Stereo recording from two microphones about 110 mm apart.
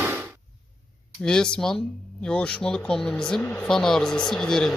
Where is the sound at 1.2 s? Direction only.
5° left (ahead or behind).